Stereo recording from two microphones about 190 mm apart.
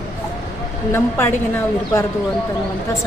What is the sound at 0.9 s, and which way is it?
A woman's voice, 15° left (ahead or behind).